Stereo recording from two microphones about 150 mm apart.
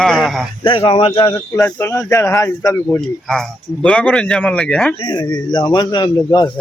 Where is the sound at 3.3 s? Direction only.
5° left (ahead or behind).